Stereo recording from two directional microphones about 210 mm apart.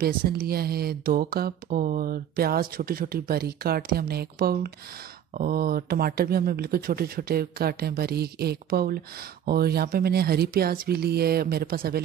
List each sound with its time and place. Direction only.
0.0 s speech: 45° right (ahead or behind)